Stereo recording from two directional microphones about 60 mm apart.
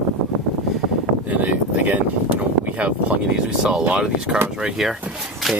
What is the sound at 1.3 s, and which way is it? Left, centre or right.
Speech, right.